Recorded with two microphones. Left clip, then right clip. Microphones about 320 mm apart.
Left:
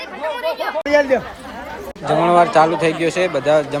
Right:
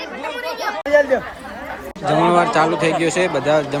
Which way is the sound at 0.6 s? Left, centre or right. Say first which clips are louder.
Right 1 dB; left.